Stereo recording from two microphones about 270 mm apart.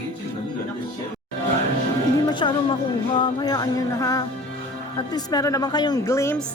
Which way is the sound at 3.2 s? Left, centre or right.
Centre.